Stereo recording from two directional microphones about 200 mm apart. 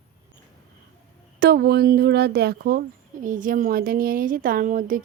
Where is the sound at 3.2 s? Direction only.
40° right (ahead or behind).